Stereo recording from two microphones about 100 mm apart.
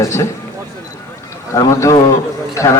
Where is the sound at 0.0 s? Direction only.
30° left (ahead or behind).